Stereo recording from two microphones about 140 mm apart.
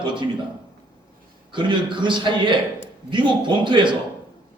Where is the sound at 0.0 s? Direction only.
35° right (ahead or behind).